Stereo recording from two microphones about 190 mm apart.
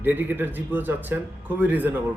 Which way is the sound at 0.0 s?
10° right (ahead or behind).